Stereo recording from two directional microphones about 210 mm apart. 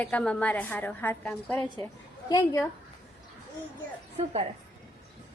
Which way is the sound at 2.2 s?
20° left (ahead or behind).